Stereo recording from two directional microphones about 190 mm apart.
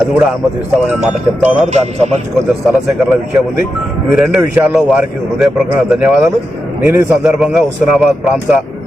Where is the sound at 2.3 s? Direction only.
5° right (ahead or behind).